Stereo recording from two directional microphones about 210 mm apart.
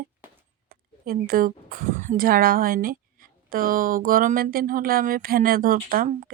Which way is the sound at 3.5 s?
40° right (ahead or behind).